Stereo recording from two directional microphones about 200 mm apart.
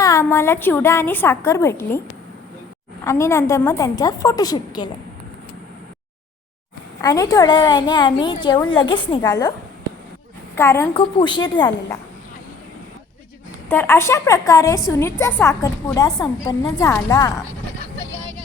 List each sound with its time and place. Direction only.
0.0 s a woman's voice: 15° left (ahead or behind)
3.0 s a woman's voice: 15° left (ahead or behind)
7.0 s a woman's voice: 20° left (ahead or behind)
10.5 s a woman's voice: 15° left (ahead or behind)
10.9 s a woman's voice: 25° left (ahead or behind)
13.7 s a woman's voice: 10° left (ahead or behind)